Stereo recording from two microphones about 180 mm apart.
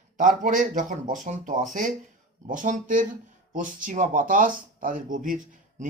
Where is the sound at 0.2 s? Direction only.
45° right (ahead or behind).